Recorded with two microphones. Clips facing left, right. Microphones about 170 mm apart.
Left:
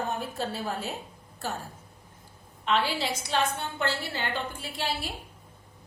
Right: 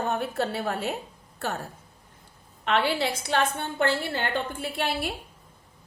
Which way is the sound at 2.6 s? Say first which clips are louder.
Right 3 dB; 60° right (ahead or behind).